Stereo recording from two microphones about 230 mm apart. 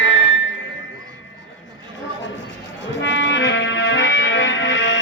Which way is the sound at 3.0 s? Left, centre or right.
Left.